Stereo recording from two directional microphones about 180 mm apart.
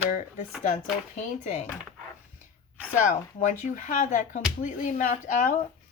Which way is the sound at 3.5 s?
45° left (ahead or behind).